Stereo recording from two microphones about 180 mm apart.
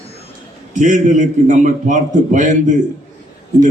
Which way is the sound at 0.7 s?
40° right (ahead or behind).